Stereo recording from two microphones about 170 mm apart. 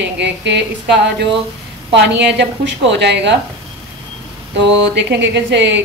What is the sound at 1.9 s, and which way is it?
A woman's voice, 90° right.